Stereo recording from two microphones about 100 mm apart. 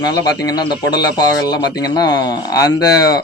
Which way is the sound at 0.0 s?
40° left (ahead or behind).